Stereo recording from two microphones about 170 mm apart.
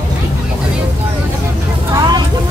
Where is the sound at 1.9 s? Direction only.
25° right (ahead or behind).